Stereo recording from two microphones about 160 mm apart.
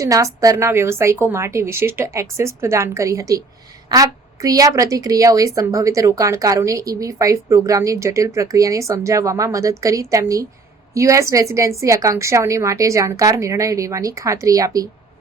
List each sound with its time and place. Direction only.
0.0 s a woman's voice: 20° right (ahead or behind)